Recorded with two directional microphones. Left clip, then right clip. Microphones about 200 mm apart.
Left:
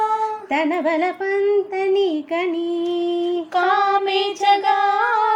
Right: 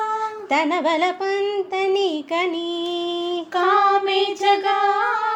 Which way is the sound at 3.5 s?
20° left (ahead or behind).